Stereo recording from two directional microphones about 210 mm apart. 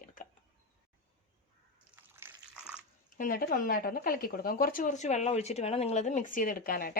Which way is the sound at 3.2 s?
40° left (ahead or behind).